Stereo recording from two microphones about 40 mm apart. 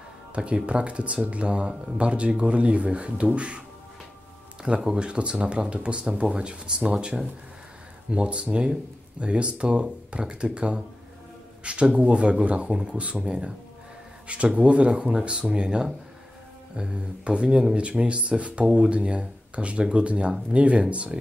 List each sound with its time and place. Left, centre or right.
0.3 s speech: right
4.6 s speech: right